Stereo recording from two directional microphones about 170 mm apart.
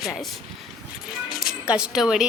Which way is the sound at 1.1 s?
5° right (ahead or behind).